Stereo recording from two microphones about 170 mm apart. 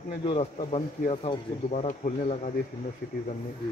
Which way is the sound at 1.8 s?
45° left (ahead or behind).